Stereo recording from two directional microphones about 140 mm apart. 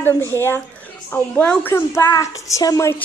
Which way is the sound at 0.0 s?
20° left (ahead or behind).